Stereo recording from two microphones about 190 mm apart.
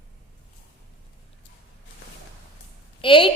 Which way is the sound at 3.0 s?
25° left (ahead or behind).